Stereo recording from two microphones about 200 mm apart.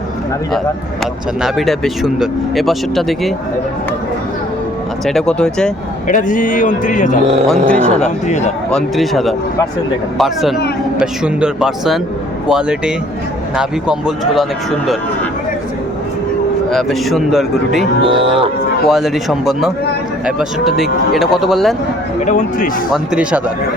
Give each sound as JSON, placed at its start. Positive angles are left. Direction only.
{"t": 1.4, "sound": "speech", "side_deg": 0}
{"t": 5.0, "sound": "speech", "side_deg": 5}
{"t": 6.1, "sound": "a man's voice", "side_deg": 40}
{"t": 7.4, "sound": "speech", "side_deg": 5}
{"t": 8.0, "sound": "a man's voice", "side_deg": 35}
{"t": 8.7, "sound": "speech", "side_deg": 0}
{"t": 16.6, "sound": "speech", "side_deg": 0}
{"t": 18.0, "sound": "speech", "side_deg": -25}
{"t": 18.9, "sound": "speech", "side_deg": 0}
{"t": 22.3, "sound": "a man's voice", "side_deg": 40}